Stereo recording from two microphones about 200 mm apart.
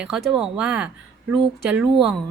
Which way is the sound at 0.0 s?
Centre (ahead or behind).